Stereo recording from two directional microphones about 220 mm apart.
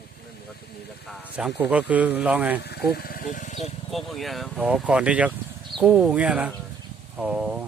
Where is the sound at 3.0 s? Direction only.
40° left (ahead or behind).